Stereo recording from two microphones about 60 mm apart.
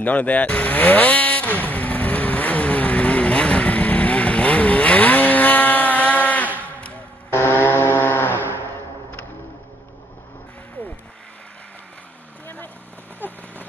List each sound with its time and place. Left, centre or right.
0.0 s vehicle: left
7.2 s vehicle: left
13.2 s a sound: left